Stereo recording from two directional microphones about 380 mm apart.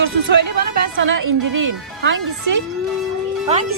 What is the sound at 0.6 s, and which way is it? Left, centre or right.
A woman's voice, right.